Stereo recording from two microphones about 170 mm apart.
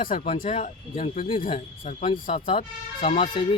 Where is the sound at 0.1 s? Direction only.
50° left (ahead or behind).